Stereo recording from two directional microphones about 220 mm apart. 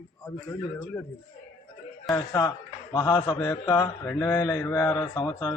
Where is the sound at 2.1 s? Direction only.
15° left (ahead or behind).